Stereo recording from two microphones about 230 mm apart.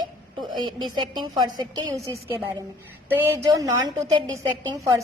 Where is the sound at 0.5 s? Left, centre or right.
Centre.